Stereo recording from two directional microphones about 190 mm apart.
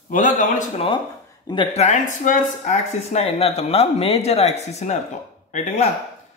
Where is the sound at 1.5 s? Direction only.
25° left (ahead or behind).